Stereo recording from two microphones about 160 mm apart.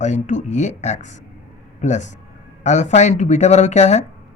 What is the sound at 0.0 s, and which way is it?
Speech, 50° left (ahead or behind).